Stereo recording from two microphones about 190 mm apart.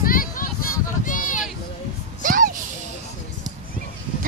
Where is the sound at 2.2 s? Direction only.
45° right (ahead or behind).